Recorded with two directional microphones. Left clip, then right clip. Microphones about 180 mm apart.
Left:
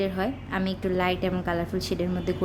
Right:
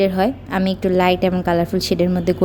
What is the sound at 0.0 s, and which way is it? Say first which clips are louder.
A woman's voice: right 11 dB; 40° right (ahead or behind).